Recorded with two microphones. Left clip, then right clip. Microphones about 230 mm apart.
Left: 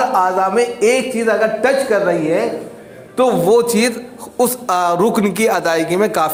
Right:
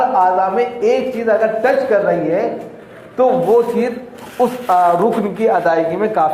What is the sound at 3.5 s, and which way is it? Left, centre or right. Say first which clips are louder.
Speech: even; left.